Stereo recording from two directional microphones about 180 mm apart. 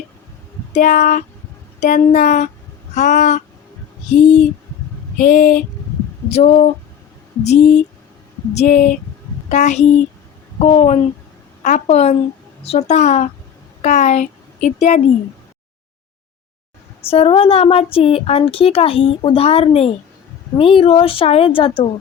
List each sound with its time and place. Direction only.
0.7 s a woman's voice: 45° left (ahead or behind)
17.1 s speech: 30° left (ahead or behind)